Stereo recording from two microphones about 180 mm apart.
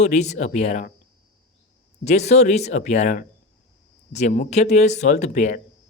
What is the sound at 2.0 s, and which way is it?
Speech, 40° left (ahead or behind).